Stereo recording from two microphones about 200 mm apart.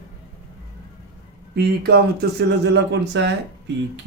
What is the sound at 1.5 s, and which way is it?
Speech, 55° right (ahead or behind).